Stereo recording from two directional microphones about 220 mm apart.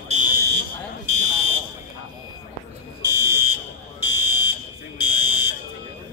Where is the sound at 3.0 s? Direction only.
15° right (ahead or behind).